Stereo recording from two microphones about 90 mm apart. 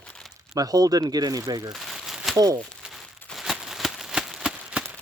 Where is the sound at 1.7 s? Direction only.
Centre (ahead or behind).